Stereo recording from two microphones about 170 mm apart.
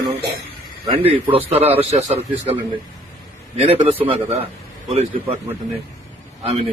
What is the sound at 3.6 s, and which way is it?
Speech, 35° right (ahead or behind).